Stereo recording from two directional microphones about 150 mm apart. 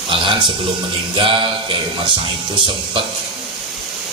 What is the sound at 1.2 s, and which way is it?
Music, 35° right (ahead or behind).